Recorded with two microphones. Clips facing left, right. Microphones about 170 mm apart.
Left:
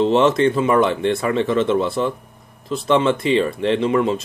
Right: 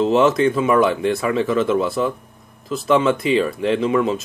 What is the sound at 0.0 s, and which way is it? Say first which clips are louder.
Speech: even; 30° left (ahead or behind).